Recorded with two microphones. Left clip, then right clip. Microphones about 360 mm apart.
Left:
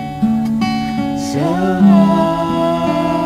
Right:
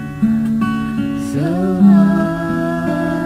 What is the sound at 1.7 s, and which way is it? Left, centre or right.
Music, left.